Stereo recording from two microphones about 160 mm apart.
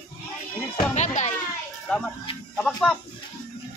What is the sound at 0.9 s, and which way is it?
Music, 45° left (ahead or behind).